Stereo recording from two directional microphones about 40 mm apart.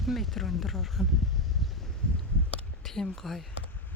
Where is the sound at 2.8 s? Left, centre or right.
Centre.